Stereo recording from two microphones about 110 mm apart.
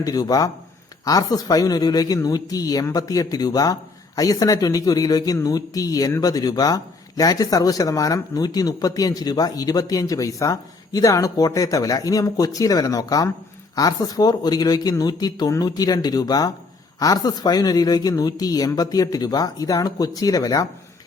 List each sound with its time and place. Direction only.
0.0 s speech: 35° left (ahead or behind)